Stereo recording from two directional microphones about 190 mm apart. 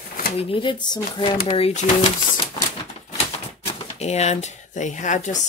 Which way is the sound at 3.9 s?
35° left (ahead or behind).